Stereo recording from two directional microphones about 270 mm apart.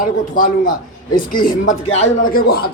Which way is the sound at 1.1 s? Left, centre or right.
Left.